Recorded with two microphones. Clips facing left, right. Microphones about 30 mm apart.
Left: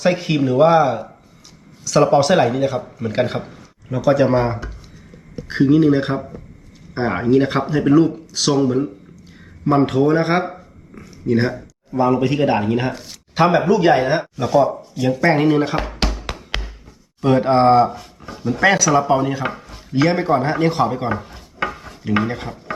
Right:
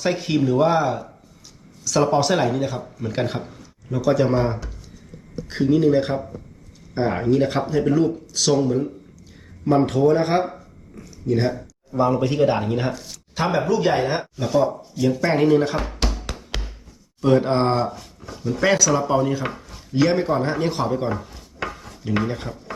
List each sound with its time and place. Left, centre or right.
0.0 s speech: centre
15.7 s music: left
16.1 s music: left
17.2 s speech: centre
21.1 s wood: left
22.0 s speech: centre